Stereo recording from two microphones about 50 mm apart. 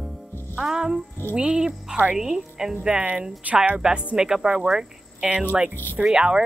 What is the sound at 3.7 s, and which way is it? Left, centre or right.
Speech, centre.